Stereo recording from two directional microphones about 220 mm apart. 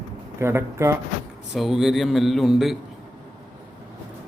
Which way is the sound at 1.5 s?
Centre (ahead or behind).